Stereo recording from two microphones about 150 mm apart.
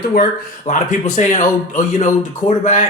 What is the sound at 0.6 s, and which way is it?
Speech, 50° left (ahead or behind).